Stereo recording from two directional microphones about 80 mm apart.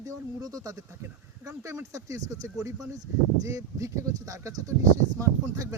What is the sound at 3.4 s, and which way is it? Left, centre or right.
Speech, right.